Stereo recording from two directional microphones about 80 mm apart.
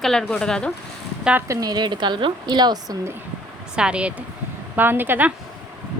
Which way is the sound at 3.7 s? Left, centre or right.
Centre.